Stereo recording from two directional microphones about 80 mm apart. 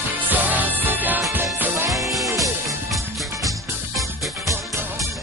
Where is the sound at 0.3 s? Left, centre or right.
Right.